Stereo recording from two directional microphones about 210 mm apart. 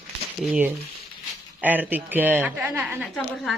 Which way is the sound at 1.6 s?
10° right (ahead or behind).